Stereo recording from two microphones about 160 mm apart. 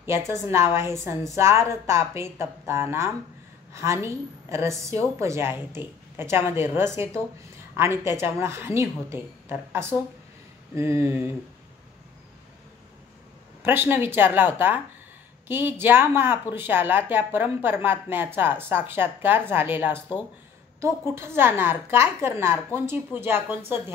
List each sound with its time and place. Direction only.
0.0 s speech: 15° right (ahead or behind)
13.6 s speech: 15° right (ahead or behind)